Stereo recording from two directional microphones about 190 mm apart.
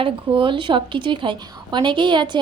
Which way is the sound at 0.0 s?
30° right (ahead or behind).